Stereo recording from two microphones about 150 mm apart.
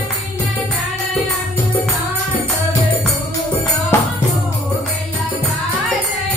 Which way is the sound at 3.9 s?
15° left (ahead or behind).